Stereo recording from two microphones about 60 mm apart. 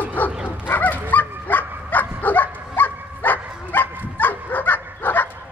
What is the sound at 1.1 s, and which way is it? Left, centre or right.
Bow-wow, left.